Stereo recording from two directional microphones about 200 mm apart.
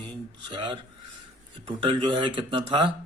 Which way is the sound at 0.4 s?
25° right (ahead or behind).